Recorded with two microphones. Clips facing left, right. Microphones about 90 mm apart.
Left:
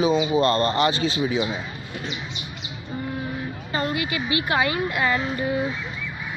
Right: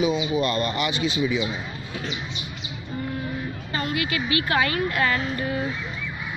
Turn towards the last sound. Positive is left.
turn(degrees=20)  # may be behind; listen again after turning